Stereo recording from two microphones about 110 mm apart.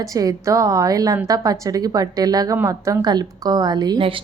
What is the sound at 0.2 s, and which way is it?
A woman's voice, 30° right (ahead or behind).